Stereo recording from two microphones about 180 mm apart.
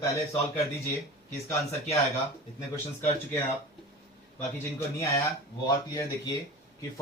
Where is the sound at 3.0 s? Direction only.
15° left (ahead or behind).